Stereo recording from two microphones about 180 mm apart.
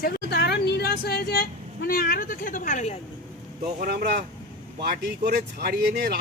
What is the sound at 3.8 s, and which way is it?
Speech, 60° right (ahead or behind).